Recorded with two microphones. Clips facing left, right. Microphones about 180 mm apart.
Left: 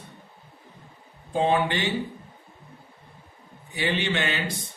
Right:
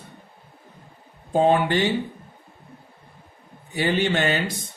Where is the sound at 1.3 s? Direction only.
50° right (ahead or behind).